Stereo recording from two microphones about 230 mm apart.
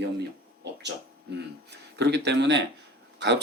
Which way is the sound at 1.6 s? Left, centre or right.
Right.